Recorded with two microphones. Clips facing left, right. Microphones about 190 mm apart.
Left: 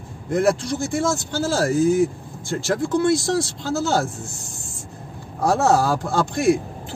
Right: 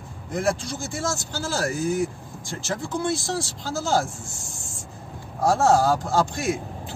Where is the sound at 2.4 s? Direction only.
65° left (ahead or behind).